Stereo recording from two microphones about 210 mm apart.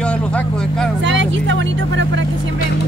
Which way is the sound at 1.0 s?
60° right (ahead or behind).